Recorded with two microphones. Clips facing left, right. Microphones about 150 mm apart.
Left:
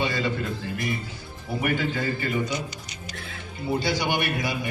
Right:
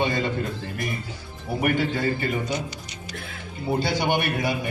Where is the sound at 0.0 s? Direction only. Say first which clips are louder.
Right 3 dB; 50° right (ahead or behind).